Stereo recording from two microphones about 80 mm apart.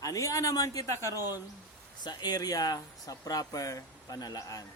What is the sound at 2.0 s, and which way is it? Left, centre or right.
Speech, left.